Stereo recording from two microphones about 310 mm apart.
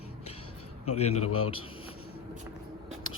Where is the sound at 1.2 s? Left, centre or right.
Left.